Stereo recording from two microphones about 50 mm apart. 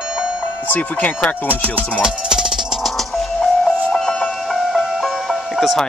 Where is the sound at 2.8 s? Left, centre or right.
Centre.